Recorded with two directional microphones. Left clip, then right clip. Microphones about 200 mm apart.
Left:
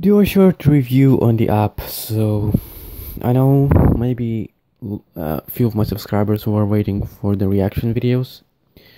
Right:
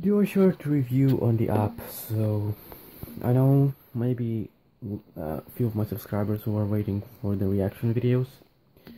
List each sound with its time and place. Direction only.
0.0 s speech: 30° left (ahead or behind)
5.1 s speech: 50° left (ahead or behind); by 8.3 s 30° left (ahead or behind)